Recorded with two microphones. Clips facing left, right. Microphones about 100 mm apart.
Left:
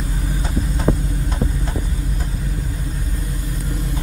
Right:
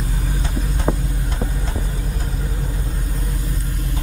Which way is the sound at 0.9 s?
20° right (ahead or behind).